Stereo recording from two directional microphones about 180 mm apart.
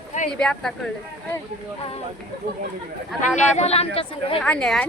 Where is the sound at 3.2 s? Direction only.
35° left (ahead or behind).